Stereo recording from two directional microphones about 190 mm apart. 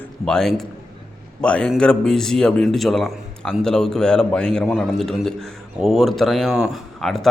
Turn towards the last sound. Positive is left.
turn(degrees=0)  # may be behind; listen again after turning